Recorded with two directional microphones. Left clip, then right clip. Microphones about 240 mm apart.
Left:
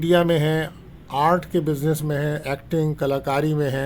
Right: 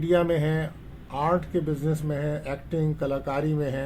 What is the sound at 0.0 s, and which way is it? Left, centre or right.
Speech, left.